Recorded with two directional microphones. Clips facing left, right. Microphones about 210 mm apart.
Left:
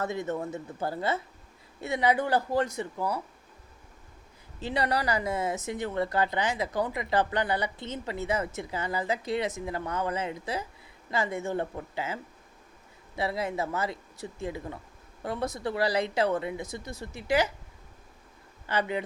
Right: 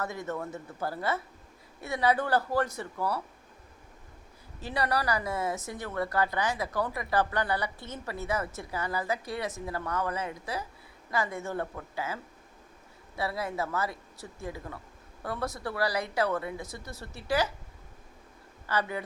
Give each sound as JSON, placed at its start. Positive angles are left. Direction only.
{"t": 0.0, "sound": "a man's voice", "side_deg": 20}
{"t": 4.6, "sound": "speech", "side_deg": 20}
{"t": 18.6, "sound": "speech", "side_deg": 20}